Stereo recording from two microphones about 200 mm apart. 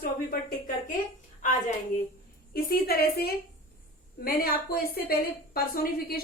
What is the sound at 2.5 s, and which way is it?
A woman's voice, 50° left (ahead or behind).